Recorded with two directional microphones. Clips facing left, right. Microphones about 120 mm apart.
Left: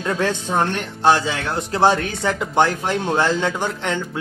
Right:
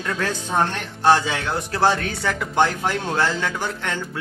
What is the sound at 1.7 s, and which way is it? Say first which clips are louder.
Speech: left 3 dB; 20° left (ahead or behind).